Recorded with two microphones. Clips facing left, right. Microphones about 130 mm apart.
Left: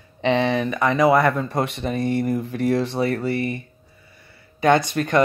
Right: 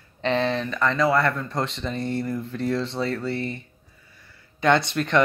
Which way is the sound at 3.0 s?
65° left (ahead or behind).